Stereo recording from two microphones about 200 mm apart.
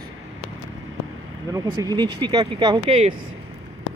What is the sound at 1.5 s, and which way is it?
Speech, 20° right (ahead or behind).